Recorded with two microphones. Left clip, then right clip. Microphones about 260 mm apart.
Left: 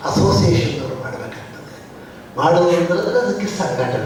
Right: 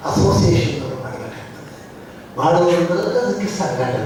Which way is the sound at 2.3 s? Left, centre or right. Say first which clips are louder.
Left 1 dB; left.